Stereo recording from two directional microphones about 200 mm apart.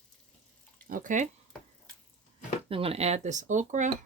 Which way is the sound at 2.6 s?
25° right (ahead or behind).